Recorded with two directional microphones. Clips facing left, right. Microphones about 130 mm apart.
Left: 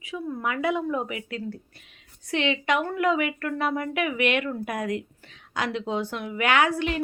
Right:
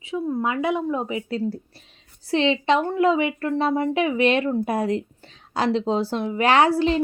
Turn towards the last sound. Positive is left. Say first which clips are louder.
# right 5 dB
turn(degrees=-30)  # may be behind; listen again after turning